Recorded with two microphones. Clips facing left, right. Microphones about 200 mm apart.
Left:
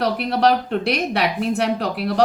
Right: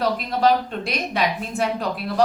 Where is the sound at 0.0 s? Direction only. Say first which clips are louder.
Left 2 dB; 70° left (ahead or behind).